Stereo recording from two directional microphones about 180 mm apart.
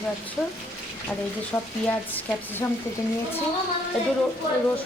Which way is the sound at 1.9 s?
10° left (ahead or behind).